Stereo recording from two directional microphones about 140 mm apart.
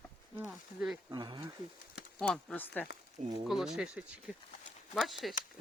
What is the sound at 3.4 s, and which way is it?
Speech, centre (ahead or behind).